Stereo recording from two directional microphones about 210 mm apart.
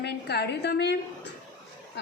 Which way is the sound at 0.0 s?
50° left (ahead or behind).